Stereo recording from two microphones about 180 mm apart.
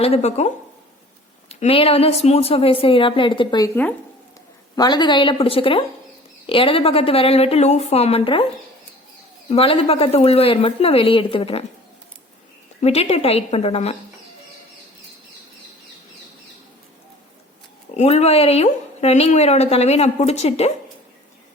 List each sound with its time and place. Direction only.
0.0 s a woman's voice: 35° left (ahead or behind)
4.7 s a woman's voice: 20° left (ahead or behind)
9.5 s a woman's voice: 35° left (ahead or behind)
12.8 s a woman's voice: 35° left (ahead or behind)
17.9 s a woman's voice: 35° left (ahead or behind)